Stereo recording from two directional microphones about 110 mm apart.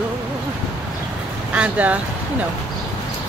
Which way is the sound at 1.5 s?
10° right (ahead or behind).